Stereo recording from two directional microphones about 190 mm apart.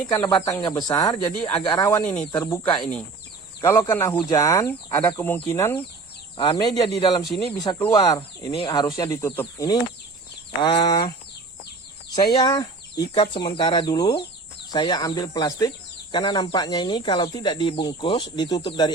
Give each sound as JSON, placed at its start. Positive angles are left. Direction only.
{"t": 0.1, "sound": "speech", "side_deg": 15}
{"t": 12.3, "sound": "speech", "side_deg": 20}